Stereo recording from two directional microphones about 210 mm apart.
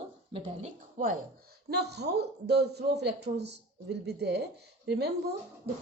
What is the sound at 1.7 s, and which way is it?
A man's voice, 50° right (ahead or behind).